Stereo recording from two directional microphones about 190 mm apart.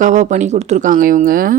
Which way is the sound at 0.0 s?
40° right (ahead or behind).